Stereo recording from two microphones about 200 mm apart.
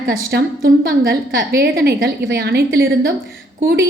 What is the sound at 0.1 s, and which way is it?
A woman's voice, 50° right (ahead or behind).